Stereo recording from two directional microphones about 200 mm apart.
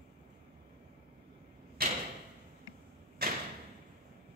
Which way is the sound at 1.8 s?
45° right (ahead or behind).